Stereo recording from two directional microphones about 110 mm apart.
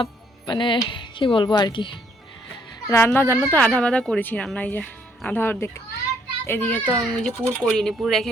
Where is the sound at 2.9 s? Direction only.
25° left (ahead or behind).